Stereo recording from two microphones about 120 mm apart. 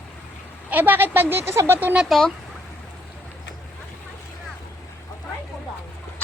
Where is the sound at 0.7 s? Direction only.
15° right (ahead or behind).